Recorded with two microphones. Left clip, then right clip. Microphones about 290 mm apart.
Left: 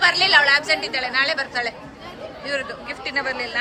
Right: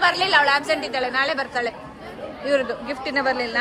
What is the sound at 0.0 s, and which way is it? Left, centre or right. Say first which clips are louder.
A woman's voice: left 2 dB; centre.